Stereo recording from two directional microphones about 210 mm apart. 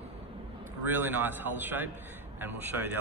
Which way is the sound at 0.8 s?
10° right (ahead or behind).